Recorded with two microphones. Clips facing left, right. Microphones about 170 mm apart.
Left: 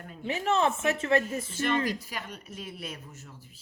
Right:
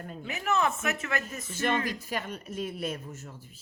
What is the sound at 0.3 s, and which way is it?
A woman's voice, 30° left (ahead or behind).